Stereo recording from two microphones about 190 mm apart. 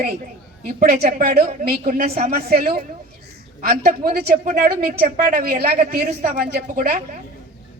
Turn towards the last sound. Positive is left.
turn(degrees=-50)  # may be behind; listen again after turning